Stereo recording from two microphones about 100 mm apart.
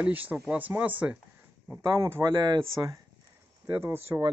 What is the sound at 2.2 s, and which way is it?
Speech, 45° right (ahead or behind).